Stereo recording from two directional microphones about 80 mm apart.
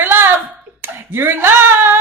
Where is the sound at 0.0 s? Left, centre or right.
Right.